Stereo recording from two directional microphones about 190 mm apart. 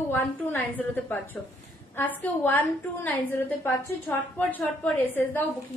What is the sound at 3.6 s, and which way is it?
A woman's voice, 10° left (ahead or behind).